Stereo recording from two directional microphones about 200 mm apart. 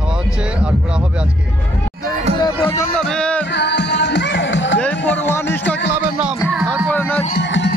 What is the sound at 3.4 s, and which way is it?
Music, 60° left (ahead or behind).